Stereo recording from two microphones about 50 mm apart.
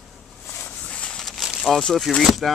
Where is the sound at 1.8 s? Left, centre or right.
Centre.